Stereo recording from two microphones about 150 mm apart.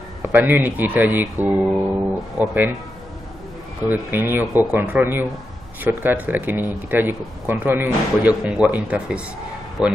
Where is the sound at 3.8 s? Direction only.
15° right (ahead or behind).